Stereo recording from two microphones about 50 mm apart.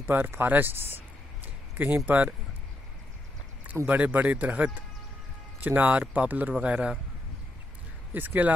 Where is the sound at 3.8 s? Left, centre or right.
Right.